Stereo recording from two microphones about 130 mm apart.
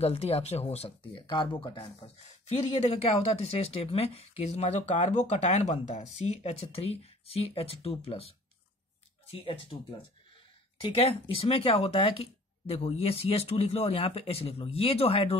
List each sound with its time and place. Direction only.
0.0 s speech: 55° left (ahead or behind)
1.2 s speech: 40° left (ahead or behind)
10.8 s speech: 45° left (ahead or behind)